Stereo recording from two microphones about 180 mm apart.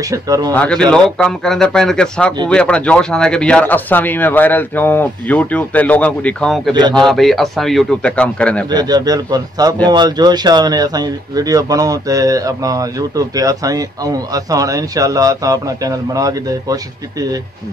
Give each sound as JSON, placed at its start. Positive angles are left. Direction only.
{"t": 0.0, "sound": "speech", "side_deg": -20}
{"t": 0.6, "sound": "speech", "side_deg": 5}
{"t": 8.6, "sound": "speech", "side_deg": -20}